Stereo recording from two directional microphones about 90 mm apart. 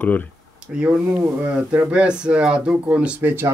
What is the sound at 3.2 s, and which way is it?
Speech, 25° right (ahead or behind).